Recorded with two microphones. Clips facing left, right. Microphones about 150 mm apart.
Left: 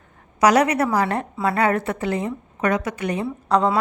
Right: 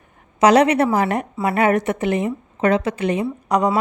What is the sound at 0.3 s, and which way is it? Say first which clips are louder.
A woman's voice: right 3 dB; 25° right (ahead or behind).